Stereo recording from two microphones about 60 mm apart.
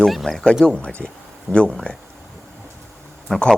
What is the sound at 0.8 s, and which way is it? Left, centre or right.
Speech, centre.